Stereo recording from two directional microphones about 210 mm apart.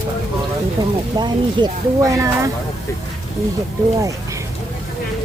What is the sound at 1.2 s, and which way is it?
Speech, 15° right (ahead or behind).